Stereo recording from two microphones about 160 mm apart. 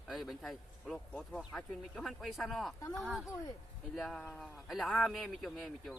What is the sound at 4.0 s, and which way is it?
A man's voice, centre (ahead or behind).